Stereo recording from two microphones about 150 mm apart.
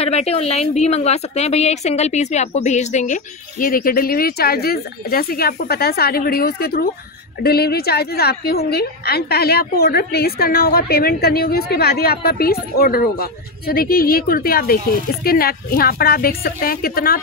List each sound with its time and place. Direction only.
0.0 s a woman's voice: 45° left (ahead or behind); by 17.2 s 75° left (ahead or behind)